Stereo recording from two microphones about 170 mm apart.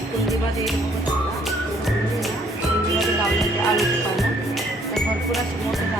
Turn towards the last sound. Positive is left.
turn(degrees=0)  # may be behind; listen again after turning